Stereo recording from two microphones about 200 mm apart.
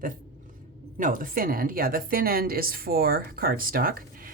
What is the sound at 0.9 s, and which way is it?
A woman's voice, 40° right (ahead or behind).